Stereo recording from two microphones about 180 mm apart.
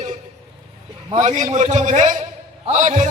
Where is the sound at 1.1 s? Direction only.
40° right (ahead or behind).